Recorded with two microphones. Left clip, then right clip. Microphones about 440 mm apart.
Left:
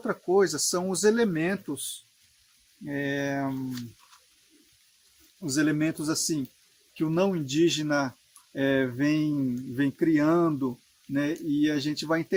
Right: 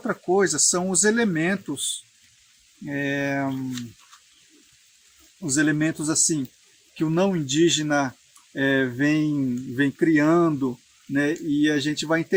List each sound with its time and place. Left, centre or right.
0.0 s speech: left
2.8 s speech: left
5.5 s speech: left